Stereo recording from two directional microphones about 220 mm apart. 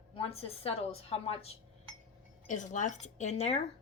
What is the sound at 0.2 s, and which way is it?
A woman's voice, 25° left (ahead or behind).